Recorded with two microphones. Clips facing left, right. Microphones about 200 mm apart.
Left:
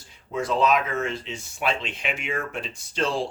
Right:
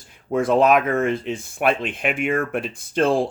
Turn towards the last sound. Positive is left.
turn(degrees=-55)  # may be behind; listen again after turning